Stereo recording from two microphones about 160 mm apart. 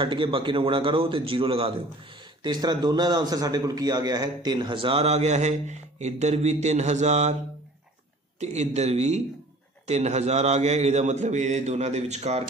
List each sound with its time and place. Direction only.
0.0 s a man's voice: 30° right (ahead or behind)
8.4 s a man's voice: 45° right (ahead or behind)